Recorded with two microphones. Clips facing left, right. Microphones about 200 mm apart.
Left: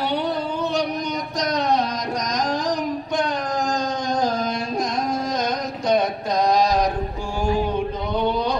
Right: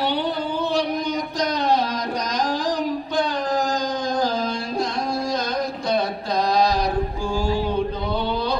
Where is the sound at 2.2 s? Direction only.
35° right (ahead or behind).